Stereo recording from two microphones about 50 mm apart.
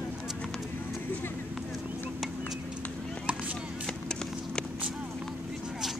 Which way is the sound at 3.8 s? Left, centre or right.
Centre.